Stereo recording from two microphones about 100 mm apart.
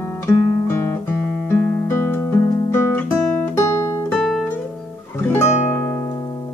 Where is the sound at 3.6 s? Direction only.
30° left (ahead or behind).